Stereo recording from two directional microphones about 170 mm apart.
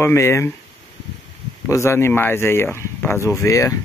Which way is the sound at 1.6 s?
15° left (ahead or behind).